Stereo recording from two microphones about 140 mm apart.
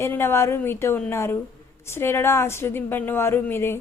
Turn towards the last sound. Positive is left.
turn(degrees=15)  # may be behind; listen again after turning